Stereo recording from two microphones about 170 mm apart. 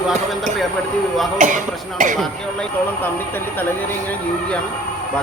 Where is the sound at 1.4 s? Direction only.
50° right (ahead or behind).